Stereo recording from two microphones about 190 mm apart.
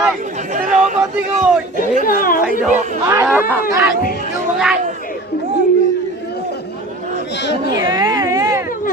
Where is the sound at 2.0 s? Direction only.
50° left (ahead or behind).